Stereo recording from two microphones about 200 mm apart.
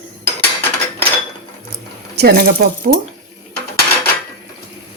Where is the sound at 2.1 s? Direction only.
55° right (ahead or behind).